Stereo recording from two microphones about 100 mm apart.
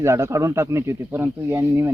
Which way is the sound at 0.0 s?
30° right (ahead or behind).